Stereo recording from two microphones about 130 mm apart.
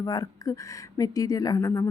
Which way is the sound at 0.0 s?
30° left (ahead or behind).